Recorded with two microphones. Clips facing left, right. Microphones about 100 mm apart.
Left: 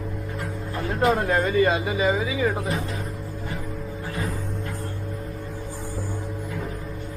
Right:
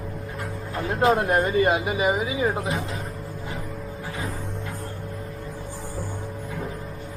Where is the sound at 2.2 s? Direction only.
30° right (ahead or behind).